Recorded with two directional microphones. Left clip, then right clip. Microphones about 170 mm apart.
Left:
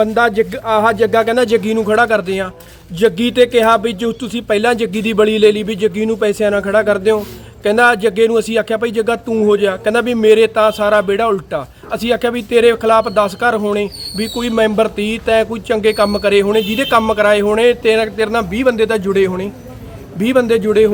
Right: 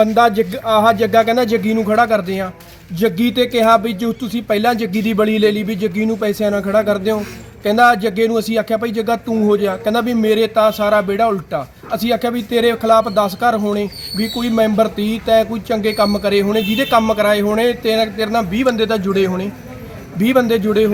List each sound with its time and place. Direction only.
0.0 s a man's voice: 20° left (ahead or behind)